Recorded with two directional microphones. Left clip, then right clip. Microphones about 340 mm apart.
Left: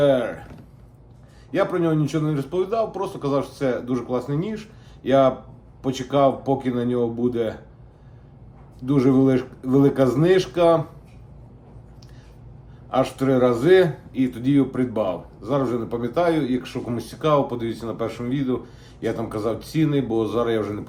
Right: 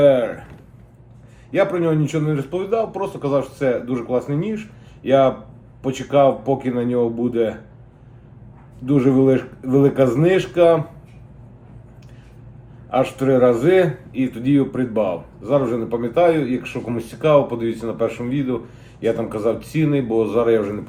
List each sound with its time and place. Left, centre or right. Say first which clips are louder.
0.0 s speech: right 5 dB; centre
1.5 s speech: right 3 dB; centre
8.9 s speech: right 3 dB; centre
12.9 s speech: right 3 dB; centre